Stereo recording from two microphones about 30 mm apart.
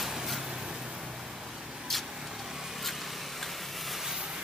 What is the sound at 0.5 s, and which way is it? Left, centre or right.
Vehicle, right.